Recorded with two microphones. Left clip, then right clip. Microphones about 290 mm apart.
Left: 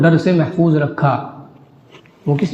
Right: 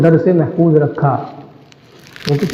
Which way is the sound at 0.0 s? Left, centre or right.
Left.